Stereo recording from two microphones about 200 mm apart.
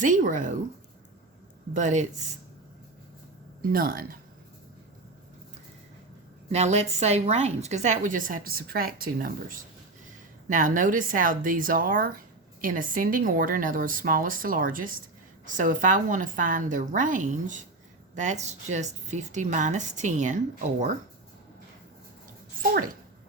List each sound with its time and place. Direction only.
0.0 s a woman's voice: 40° right (ahead or behind)
1.7 s a woman's voice: 40° right (ahead or behind)
3.7 s speech: 45° right (ahead or behind)
6.5 s a woman's voice: 35° right (ahead or behind)